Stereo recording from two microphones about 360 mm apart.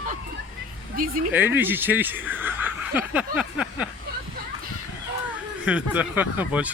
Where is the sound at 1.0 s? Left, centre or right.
Right.